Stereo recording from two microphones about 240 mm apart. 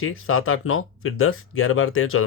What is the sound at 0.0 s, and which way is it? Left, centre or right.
Speech, left.